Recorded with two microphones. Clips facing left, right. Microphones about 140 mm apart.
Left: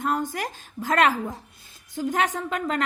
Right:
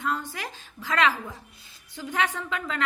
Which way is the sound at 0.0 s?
45° left (ahead or behind).